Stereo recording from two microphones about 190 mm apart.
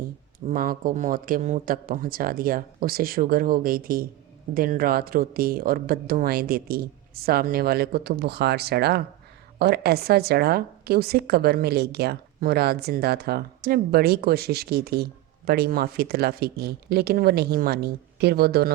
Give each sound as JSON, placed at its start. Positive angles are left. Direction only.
{"t": 0.3, "sound": "a woman's voice", "side_deg": -45}